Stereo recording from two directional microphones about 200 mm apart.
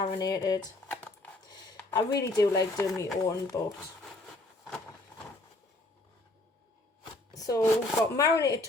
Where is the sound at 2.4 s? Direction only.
15° left (ahead or behind).